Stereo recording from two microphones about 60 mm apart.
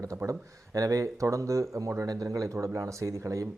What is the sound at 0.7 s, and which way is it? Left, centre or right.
Speech, right.